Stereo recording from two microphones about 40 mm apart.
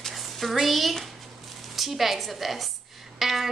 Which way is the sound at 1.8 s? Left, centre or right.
Centre.